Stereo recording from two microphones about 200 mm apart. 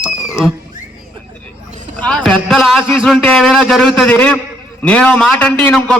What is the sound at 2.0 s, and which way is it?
A man's voice, centre (ahead or behind).